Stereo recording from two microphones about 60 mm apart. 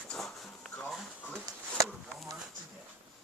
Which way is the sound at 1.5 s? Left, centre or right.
Right.